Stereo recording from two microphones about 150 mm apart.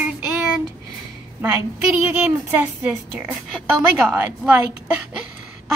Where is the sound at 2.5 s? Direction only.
15° right (ahead or behind).